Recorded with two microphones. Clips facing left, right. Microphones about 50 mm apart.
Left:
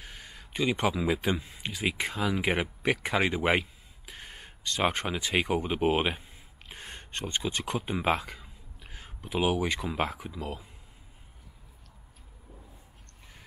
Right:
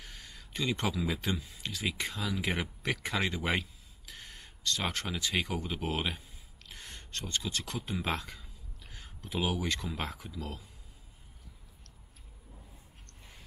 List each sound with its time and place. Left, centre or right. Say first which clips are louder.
0.0 s speech: left 3 dB; centre